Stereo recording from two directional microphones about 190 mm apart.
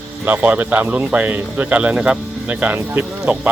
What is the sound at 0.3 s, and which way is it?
Speech, 10° right (ahead or behind).